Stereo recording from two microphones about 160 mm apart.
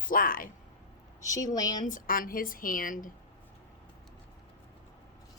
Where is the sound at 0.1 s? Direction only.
65° left (ahead or behind).